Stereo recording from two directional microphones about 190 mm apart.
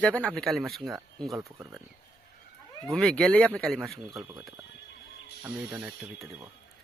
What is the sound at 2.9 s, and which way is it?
Speech, 5° left (ahead or behind).